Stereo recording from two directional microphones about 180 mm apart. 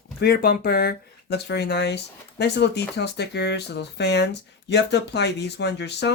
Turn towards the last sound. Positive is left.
turn(degrees=70)  # may be behind; listen again after turning